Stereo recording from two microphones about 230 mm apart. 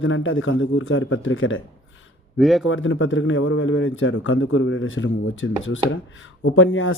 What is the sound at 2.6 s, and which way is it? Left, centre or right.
A man's voice, left.